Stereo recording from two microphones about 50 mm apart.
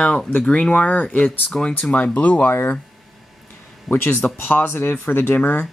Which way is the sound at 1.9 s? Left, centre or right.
Left.